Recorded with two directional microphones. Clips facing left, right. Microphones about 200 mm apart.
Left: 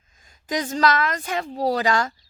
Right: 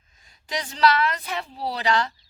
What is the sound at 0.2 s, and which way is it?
A woman's voice, 45° left (ahead or behind).